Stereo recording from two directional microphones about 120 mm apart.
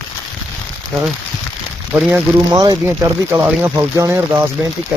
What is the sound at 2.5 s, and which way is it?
Speech, 35° right (ahead or behind).